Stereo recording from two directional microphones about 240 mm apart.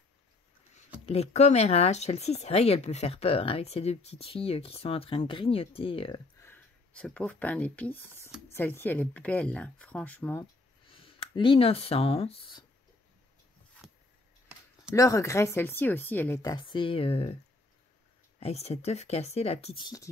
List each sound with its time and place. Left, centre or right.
1.0 s speech: left
6.4 s speech: centre
11.1 s speech: left
13.8 s a sound: centre
15.0 s speech: centre
16.5 s speech: left
18.4 s speech: left